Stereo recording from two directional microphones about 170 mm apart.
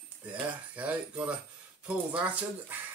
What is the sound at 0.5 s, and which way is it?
Speech, 10° right (ahead or behind).